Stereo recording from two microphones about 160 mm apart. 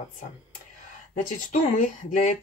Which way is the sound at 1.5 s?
55° left (ahead or behind).